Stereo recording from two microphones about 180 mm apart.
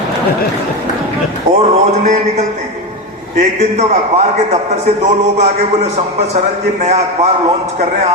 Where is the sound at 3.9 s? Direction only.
40° right (ahead or behind).